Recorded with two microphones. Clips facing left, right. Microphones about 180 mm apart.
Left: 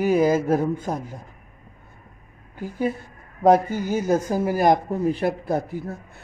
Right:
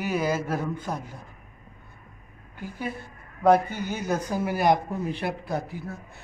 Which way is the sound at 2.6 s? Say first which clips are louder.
Left 8 dB; 40° left (ahead or behind).